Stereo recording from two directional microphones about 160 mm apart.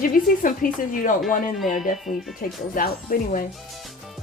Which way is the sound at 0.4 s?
55° left (ahead or behind).